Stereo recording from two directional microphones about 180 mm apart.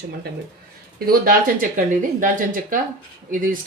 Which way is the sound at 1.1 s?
50° right (ahead or behind).